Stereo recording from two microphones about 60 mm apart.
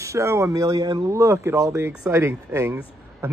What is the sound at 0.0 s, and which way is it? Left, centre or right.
Speech, right.